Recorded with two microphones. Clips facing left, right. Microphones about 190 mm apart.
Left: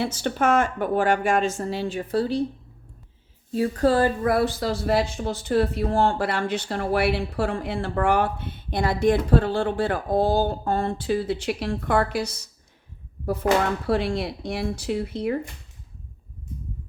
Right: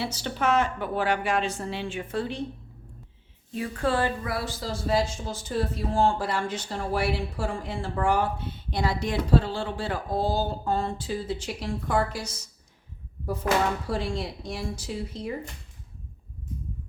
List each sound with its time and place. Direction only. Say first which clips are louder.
0.0 s a woman's voice: left 5 dB; 50° left (ahead or behind)
3.5 s a woman's voice: left 6 dB; 40° left (ahead or behind); by 12.4 s 65° left (ahead or behind)
13.8 s a woman's voice: left 6 dB; 65° left (ahead or behind)